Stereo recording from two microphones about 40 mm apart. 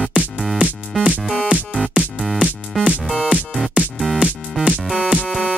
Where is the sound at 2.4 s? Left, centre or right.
Centre.